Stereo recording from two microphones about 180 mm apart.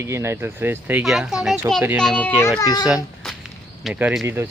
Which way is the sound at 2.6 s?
20° left (ahead or behind).